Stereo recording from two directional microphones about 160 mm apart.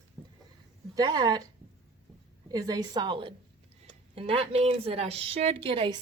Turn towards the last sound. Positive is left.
turn(degrees=-35)  # may be behind; listen again after turning